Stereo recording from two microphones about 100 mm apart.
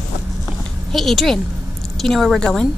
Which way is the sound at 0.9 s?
Centre (ahead or behind).